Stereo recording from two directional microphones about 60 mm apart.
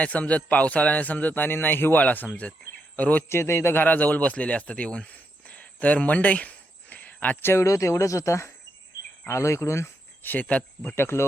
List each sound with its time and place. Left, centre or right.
0.0 s a man's voice: left
3.2 s speech: left
3.8 s speech: left
7.4 s speech: left
10.2 s a man's voice: left
10.9 s speech: left